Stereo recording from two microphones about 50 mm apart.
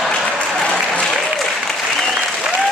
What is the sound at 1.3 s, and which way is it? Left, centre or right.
Applause, centre.